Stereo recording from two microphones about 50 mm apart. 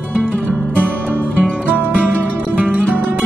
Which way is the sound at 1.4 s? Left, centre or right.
Right.